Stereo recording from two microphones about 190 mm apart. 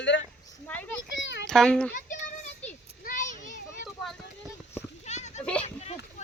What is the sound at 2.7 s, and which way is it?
Children playing, 45° left (ahead or behind).